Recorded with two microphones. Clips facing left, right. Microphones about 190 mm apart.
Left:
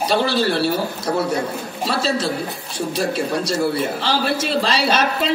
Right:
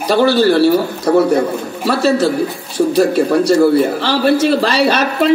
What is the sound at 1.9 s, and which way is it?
A man's voice, 65° right (ahead or behind).